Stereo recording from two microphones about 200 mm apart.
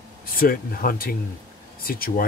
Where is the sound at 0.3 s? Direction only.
45° left (ahead or behind).